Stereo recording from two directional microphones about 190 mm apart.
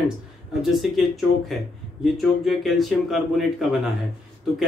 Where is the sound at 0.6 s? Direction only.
Centre (ahead or behind).